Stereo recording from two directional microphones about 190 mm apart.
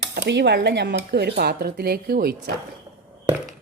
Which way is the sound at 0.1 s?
60° right (ahead or behind).